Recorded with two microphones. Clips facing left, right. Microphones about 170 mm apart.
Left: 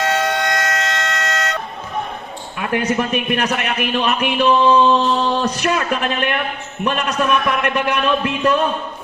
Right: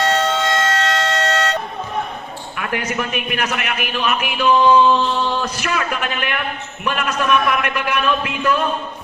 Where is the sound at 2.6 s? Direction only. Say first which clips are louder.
Left 4 dB; 25° left (ahead or behind).